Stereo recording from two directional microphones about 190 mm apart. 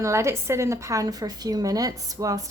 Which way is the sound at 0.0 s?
15° right (ahead or behind).